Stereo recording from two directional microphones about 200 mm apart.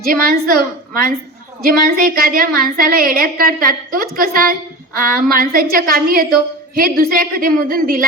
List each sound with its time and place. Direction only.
0.0 s a woman's voice: 45° right (ahead or behind)